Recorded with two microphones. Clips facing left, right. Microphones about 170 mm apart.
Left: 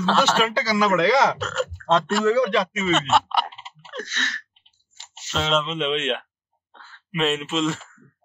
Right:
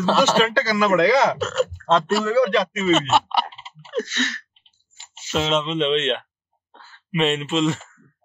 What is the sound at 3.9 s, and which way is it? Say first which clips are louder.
Sneeze: right 9 dB; 10° right (ahead or behind).